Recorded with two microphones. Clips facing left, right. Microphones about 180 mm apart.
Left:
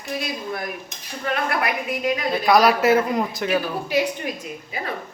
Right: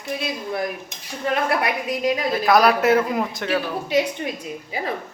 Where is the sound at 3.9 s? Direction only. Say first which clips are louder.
Right 2 dB; 25° right (ahead or behind).